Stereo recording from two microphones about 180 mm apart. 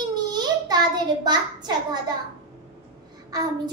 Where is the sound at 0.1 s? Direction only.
25° right (ahead or behind).